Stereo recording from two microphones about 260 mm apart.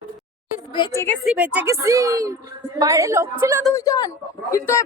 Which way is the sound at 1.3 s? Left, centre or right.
Centre.